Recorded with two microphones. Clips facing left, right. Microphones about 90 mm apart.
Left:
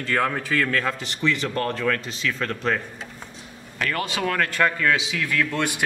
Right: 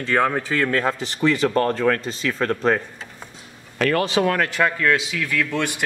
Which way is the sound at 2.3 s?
30° right (ahead or behind).